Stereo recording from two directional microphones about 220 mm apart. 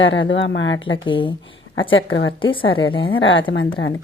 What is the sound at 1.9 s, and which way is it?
Speech, 55° left (ahead or behind).